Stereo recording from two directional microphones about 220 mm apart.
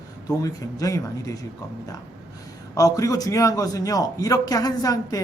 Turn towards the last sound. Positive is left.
turn(degrees=15)  # may be behind; listen again after turning